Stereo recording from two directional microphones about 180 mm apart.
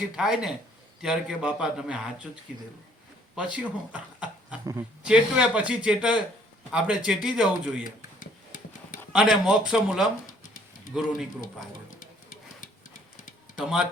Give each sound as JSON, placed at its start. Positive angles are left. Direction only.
{"t": 0.2, "sound": "speech", "side_deg": -5}
{"t": 7.9, "sound": "a sound", "side_deg": 50}
{"t": 9.1, "sound": "speech", "side_deg": -5}
{"t": 13.6, "sound": "speech", "side_deg": -5}